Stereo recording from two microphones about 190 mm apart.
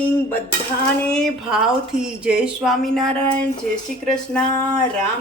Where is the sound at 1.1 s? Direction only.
5° left (ahead or behind).